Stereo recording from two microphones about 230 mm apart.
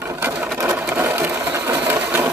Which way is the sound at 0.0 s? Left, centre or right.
Centre.